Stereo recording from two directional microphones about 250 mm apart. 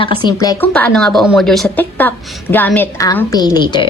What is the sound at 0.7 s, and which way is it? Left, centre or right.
A woman's voice, centre.